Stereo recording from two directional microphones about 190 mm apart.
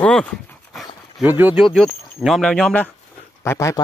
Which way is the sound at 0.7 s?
10° right (ahead or behind).